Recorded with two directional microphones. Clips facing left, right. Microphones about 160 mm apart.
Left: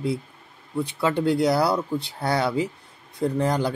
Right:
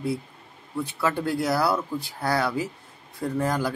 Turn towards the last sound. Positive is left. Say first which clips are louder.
# left 3 dB
turn(degrees=20)  # may be behind; listen again after turning